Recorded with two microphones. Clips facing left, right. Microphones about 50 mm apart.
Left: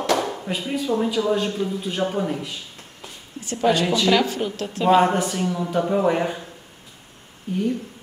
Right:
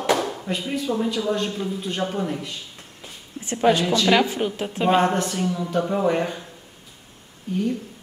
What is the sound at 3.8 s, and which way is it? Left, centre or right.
Speech, centre.